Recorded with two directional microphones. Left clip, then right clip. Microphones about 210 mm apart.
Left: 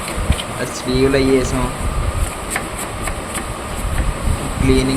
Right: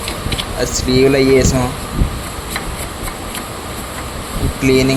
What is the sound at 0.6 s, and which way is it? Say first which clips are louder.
Speech: right 5 dB; 20° right (ahead or behind).